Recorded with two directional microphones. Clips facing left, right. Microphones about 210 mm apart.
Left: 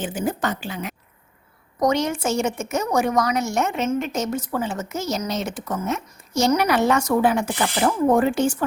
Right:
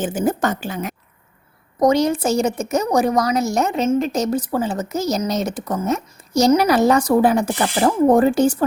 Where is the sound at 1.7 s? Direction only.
30° right (ahead or behind).